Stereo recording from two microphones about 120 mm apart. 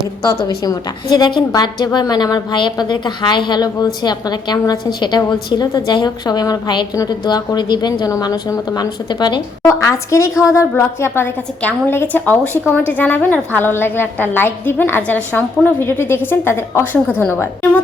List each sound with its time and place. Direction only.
0.3 s a woman's voice: 35° left (ahead or behind)
9.6 s a woman's voice: 25° left (ahead or behind)